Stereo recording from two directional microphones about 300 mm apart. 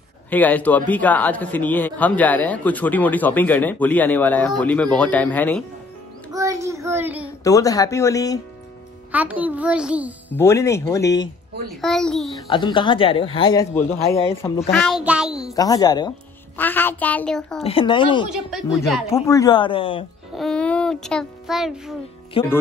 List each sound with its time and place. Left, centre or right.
0.3 s a man's voice: centre
6.3 s child singing: centre
7.4 s speech: centre
9.1 s a man's voice: centre
10.3 s a man's voice: centre
12.4 s speech: centre
14.7 s a man's voice: centre
15.5 s a man's voice: centre
17.6 s speech: centre
20.3 s a child's voice: centre